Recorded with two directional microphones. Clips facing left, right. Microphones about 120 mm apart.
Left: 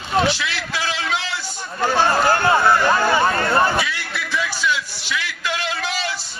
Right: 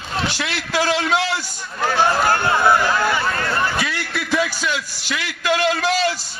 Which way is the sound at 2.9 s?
35° left (ahead or behind).